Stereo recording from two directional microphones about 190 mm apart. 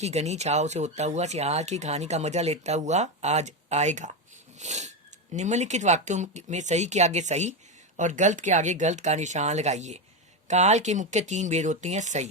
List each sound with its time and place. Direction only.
0.0 s speech: 35° right (ahead or behind)
4.5 s a sound: 40° right (ahead or behind)
5.3 s speech: 40° right (ahead or behind)